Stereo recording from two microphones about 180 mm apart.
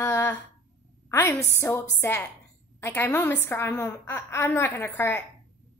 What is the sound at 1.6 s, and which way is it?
A woman's voice, 15° left (ahead or behind).